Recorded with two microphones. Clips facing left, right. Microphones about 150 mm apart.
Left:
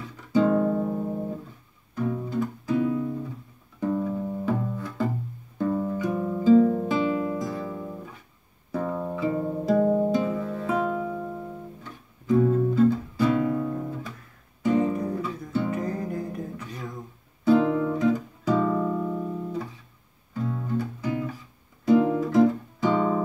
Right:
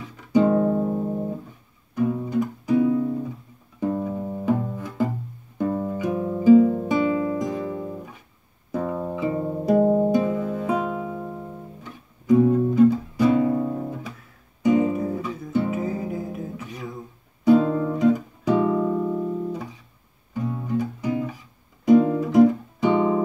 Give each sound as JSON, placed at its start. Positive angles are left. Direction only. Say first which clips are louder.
{"t": 0.3, "sound": "guitar", "louder": "right 3 dB", "side_deg": -15}
{"t": 2.0, "sound": "music", "louder": "right 4 dB", "side_deg": -15}
{"t": 3.9, "sound": "music", "louder": "even", "side_deg": -25}
{"t": 14.6, "sound": "music", "louder": "right 3 dB", "side_deg": -10}
{"t": 20.3, "sound": "guitar", "louder": "right 3 dB", "side_deg": -15}